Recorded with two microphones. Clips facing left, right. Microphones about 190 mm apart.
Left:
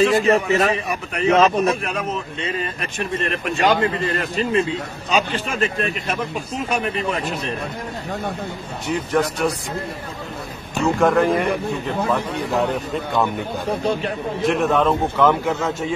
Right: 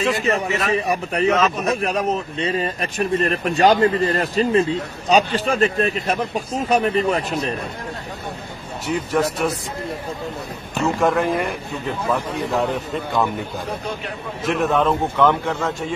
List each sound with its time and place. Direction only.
0.0 s speech: 35° left (ahead or behind)
0.7 s speech: 35° right (ahead or behind)
1.3 s speech: 35° left (ahead or behind)
1.7 s speech: 35° right (ahead or behind)
8.8 s a man's voice: 5° right (ahead or behind)
11.0 s a man's voice: centre (ahead or behind)